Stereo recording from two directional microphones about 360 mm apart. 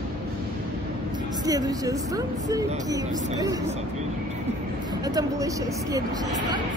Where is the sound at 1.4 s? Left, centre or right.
Centre.